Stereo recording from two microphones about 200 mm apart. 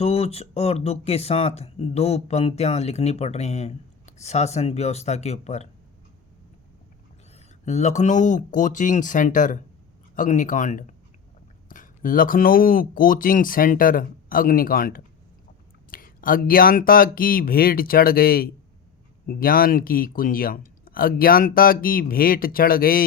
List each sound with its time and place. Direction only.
0.0 s speech: 30° left (ahead or behind)
7.3 s speech: 35° left (ahead or behind)